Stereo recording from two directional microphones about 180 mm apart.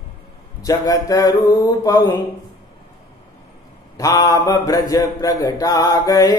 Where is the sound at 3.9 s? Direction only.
20° left (ahead or behind).